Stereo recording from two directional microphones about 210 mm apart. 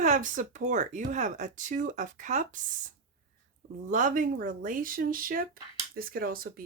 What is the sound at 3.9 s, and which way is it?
Speech, 40° right (ahead or behind).